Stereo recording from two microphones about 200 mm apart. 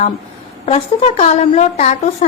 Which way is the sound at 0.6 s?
30° left (ahead or behind).